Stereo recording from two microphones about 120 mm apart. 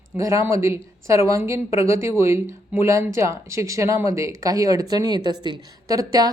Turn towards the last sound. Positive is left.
turn(degrees=-30)  # may be behind; listen again after turning